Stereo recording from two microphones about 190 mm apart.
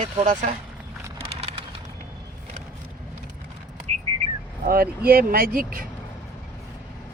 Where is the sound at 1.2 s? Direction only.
30° right (ahead or behind).